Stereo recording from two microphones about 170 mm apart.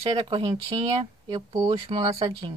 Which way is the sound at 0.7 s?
30° right (ahead or behind).